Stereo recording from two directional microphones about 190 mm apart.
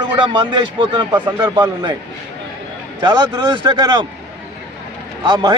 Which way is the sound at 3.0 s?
25° right (ahead or behind).